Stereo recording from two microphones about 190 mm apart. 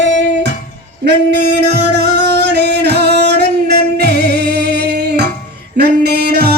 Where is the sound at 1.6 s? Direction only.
60° right (ahead or behind).